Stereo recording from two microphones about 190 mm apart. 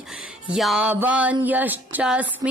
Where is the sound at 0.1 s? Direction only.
5° right (ahead or behind).